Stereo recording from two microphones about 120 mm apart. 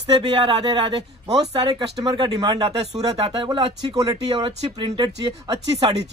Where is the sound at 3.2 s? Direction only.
50° right (ahead or behind).